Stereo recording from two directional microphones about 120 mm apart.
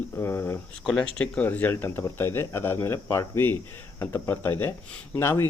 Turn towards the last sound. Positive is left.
turn(degrees=20)  # may be behind; listen again after turning